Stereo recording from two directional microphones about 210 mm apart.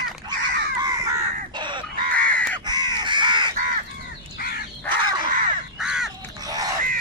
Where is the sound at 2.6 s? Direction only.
20° right (ahead or behind).